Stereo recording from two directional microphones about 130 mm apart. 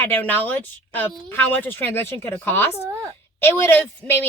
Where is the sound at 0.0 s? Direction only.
15° left (ahead or behind).